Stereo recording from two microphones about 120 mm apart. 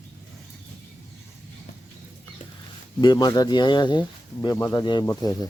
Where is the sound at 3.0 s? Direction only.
35° left (ahead or behind).